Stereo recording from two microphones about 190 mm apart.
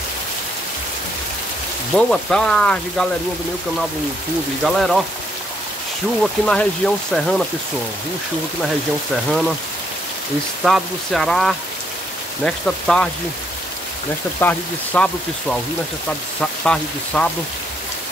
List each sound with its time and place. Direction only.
2.0 s speech: 5° left (ahead or behind)
4.6 s speech: centre (ahead or behind)
6.2 s speech: 5° left (ahead or behind)
9.1 s speech: centre (ahead or behind)
10.6 s speech: centre (ahead or behind)
14.4 s speech: 10° left (ahead or behind)